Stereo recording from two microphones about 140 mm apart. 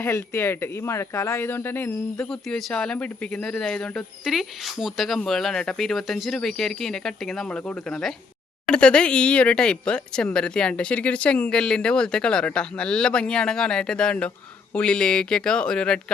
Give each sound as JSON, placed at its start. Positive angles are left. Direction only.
{"t": 0.0, "sound": "speech", "side_deg": 20}
{"t": 2.3, "sound": "speech", "side_deg": 0}